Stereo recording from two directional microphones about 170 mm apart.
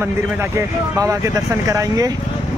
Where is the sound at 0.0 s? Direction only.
15° right (ahead or behind).